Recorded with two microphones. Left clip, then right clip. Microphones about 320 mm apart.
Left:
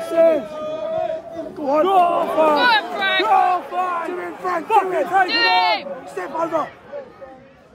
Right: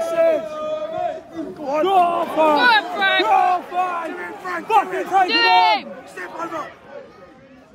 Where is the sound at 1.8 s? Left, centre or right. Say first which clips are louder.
Right 1 dB; centre.